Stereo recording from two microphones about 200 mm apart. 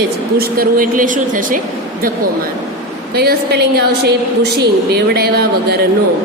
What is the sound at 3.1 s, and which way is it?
Speech, 50° right (ahead or behind).